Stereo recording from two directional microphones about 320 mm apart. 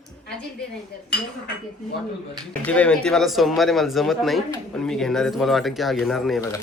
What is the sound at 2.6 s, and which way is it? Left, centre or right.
Speech, centre.